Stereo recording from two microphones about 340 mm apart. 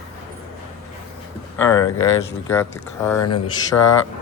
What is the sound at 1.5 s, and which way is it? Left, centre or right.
Speech, centre.